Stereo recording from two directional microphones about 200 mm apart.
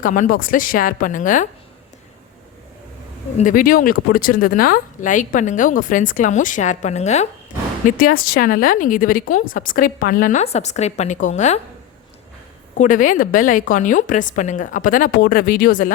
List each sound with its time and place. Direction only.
0.0 s a woman's voice: 40° left (ahead or behind)
3.3 s speech: 40° left (ahead or behind)
7.9 s a woman's voice: 45° left (ahead or behind)
12.7 s speech: 40° left (ahead or behind)